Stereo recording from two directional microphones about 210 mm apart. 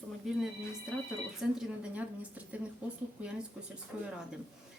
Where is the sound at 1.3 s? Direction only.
5° right (ahead or behind).